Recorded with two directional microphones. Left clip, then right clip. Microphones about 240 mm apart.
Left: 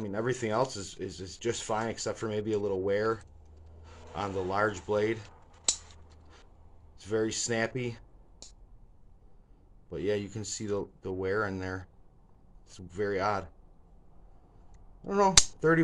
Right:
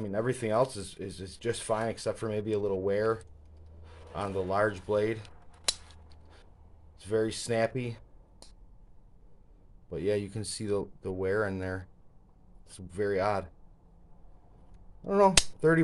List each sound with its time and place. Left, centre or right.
0.0 s speech: right
7.0 s speech: centre
9.8 s speech: right
15.0 s speech: right